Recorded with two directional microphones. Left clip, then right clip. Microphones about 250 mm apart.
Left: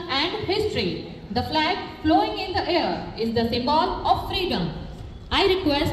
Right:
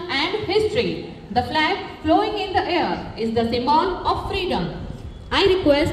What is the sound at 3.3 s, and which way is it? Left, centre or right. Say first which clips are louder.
A woman's voice: right 4 dB; centre.